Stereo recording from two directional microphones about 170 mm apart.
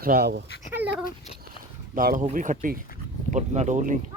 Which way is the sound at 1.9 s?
55° right (ahead or behind).